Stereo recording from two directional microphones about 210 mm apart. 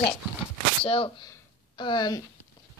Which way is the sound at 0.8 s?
25° left (ahead or behind).